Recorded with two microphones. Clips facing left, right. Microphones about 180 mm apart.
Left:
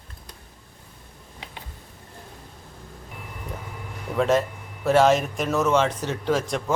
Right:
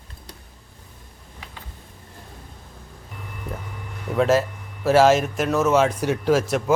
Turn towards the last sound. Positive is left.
turn(degrees=-5)  # may be behind; listen again after turning